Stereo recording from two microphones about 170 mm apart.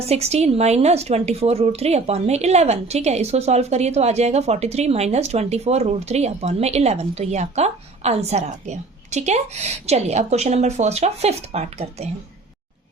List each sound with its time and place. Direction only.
0.1 s a woman's voice: 40° right (ahead or behind)